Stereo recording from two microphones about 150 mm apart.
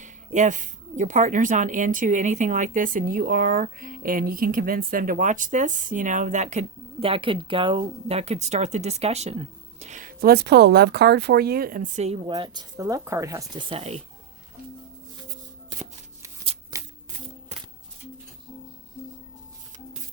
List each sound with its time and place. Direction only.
0.0 s speech: 55° right (ahead or behind)
12.2 s speech: 30° right (ahead or behind)
16.7 s shuffling cards: 25° right (ahead or behind)